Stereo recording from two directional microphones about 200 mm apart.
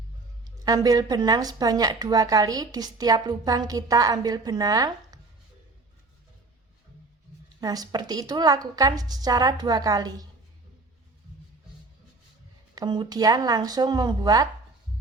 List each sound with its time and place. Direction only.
0.4 s speech: 20° right (ahead or behind)
7.6 s speech: 20° right (ahead or behind)
12.7 s speech: 20° right (ahead or behind)